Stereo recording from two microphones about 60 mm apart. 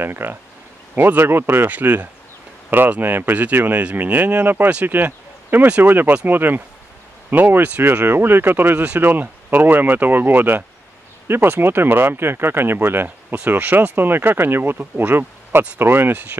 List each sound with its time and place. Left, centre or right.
0.0 s speech: right